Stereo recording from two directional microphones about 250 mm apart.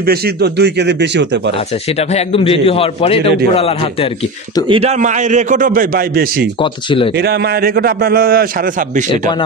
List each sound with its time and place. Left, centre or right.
0.0 s a man's voice: right
1.9 s a man's voice: left
4.6 s a man's voice: right
6.6 s a man's voice: centre
7.2 s a man's voice: right